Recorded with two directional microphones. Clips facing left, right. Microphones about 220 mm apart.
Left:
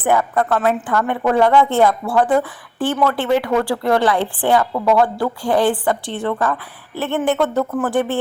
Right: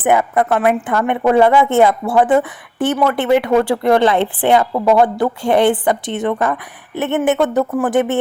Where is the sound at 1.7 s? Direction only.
20° right (ahead or behind).